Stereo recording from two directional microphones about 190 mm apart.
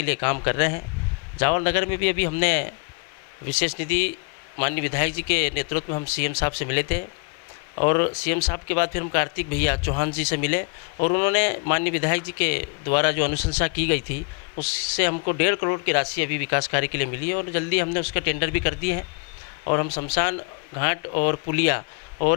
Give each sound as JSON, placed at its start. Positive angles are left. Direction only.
{"t": 0.0, "sound": "speech", "side_deg": 15}
{"t": 20.1, "sound": "speech", "side_deg": 15}